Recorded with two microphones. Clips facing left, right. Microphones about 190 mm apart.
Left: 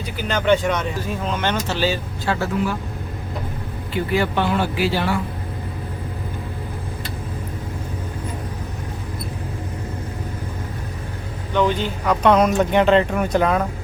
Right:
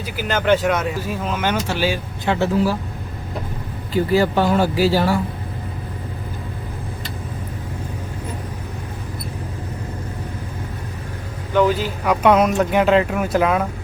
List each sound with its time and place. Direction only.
0.2 s speech: 5° right (ahead or behind); by 2.5 s 20° right (ahead or behind)
3.9 s speech: 40° right (ahead or behind)
11.5 s speech: 5° right (ahead or behind)